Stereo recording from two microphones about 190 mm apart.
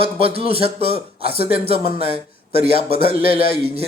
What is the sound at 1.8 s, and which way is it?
Speech, 50° left (ahead or behind).